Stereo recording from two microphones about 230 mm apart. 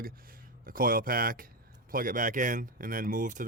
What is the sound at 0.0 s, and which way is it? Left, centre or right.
Speech, right.